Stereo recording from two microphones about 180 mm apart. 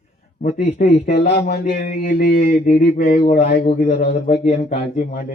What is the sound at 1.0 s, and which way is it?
Speech, 70° left (ahead or behind).